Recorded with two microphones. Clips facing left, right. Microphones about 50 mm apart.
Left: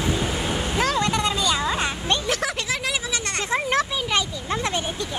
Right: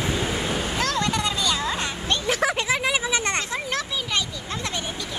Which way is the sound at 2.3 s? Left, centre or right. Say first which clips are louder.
Right 3 dB; centre.